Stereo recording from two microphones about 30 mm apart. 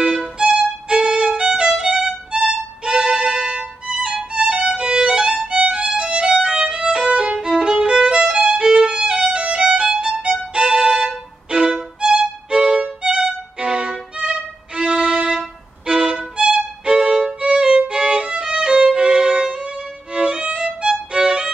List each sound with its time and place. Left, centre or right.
0.0 s violin: centre
0.4 s violin: right
1.4 s violin: right
2.8 s music: right
4.4 s violin: right
5.6 s music: right
5.9 s violin: right
9.7 s violin: right
11.5 s music: right
13.6 s violin: right
14.8 s violin: right
21.1 s music: right